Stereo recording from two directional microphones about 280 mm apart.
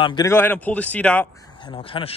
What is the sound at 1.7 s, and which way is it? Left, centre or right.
Speech, centre.